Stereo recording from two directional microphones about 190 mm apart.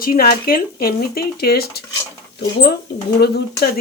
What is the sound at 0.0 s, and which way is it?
Speech, 50° left (ahead or behind).